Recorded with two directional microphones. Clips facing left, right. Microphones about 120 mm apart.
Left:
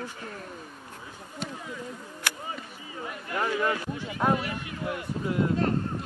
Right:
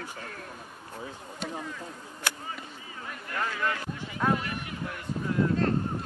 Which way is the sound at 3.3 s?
20° left (ahead or behind).